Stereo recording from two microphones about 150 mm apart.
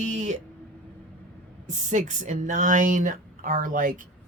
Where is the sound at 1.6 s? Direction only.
55° right (ahead or behind).